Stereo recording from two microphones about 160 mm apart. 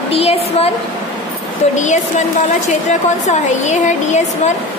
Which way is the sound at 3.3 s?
50° left (ahead or behind).